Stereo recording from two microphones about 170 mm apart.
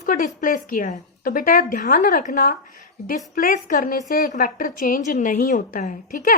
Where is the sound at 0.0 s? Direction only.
50° left (ahead or behind).